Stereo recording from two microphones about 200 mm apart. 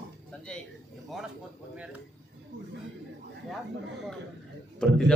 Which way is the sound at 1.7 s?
5° right (ahead or behind).